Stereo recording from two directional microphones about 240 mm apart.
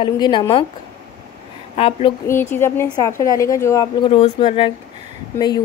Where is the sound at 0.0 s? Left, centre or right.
Centre.